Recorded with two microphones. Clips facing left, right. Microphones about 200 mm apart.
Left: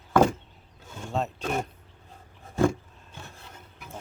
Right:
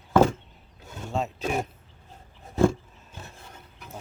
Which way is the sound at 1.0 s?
Centre (ahead or behind).